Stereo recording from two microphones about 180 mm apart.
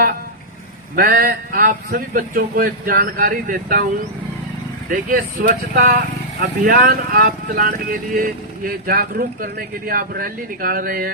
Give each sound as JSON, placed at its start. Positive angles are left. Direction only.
{"t": 0.9, "sound": "speech", "side_deg": -50}
{"t": 4.9, "sound": "speech", "side_deg": -50}